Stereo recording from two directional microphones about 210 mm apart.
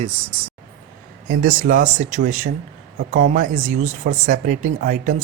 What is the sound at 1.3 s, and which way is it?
Speech, 40° right (ahead or behind).